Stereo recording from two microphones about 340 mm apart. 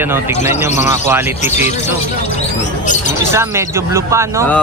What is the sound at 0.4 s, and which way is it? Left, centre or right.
Speech, centre.